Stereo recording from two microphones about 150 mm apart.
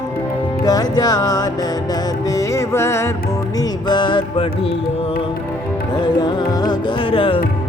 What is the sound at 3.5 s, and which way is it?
Music, 30° left (ahead or behind).